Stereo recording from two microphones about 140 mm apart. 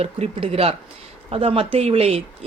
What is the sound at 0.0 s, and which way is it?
Speech, 45° right (ahead or behind).